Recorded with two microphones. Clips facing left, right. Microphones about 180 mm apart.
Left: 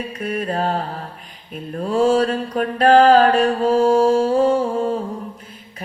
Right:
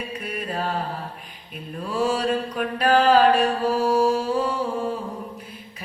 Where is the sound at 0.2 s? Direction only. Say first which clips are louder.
Left 8 dB; 50° left (ahead or behind).